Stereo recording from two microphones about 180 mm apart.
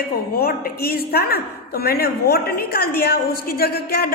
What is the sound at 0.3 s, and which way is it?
A woman's voice, 55° left (ahead or behind).